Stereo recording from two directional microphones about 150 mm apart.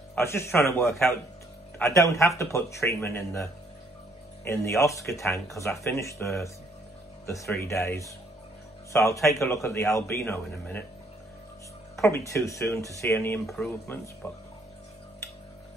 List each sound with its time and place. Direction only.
0.1 s a man's voice: 15° left (ahead or behind)
4.5 s speech: 20° left (ahead or behind)
7.5 s speech: 20° left (ahead or behind)
12.0 s speech: 20° left (ahead or behind)